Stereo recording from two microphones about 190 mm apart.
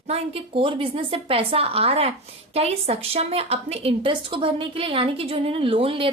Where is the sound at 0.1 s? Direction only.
30° right (ahead or behind).